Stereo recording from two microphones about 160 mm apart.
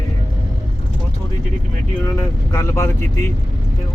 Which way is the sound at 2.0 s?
20° left (ahead or behind).